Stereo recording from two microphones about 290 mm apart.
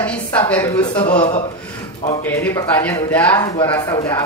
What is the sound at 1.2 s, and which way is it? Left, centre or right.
Speech, centre.